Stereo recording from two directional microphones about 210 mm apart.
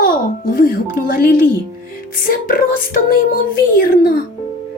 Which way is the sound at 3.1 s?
45° left (ahead or behind).